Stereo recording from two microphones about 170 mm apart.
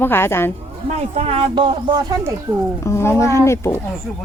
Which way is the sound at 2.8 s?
15° left (ahead or behind).